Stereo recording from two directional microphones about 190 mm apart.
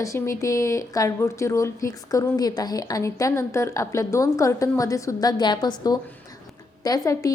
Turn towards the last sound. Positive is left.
turn(degrees=20)  # may be behind; listen again after turning